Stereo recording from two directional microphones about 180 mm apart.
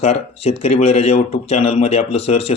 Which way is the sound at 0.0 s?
35° left (ahead or behind).